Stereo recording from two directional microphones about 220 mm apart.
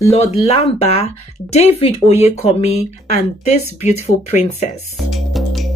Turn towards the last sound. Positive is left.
turn(degrees=0)  # may be behind; listen again after turning